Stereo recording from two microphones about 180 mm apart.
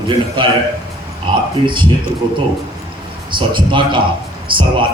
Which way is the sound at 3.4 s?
25° right (ahead or behind).